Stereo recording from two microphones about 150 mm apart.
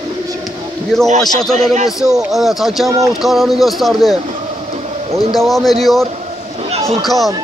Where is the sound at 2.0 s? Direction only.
5° right (ahead or behind).